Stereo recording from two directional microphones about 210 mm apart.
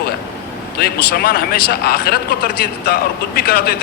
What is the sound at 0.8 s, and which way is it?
Speech, 45° left (ahead or behind).